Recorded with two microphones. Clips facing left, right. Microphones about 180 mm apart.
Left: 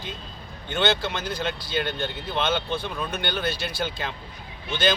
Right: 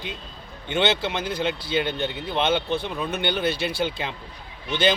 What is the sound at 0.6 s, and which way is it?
Speech, 15° right (ahead or behind).